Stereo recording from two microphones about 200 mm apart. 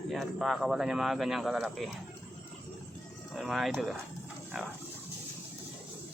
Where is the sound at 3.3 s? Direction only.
Centre (ahead or behind).